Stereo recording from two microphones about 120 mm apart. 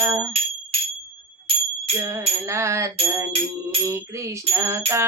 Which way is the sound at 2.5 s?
25° right (ahead or behind).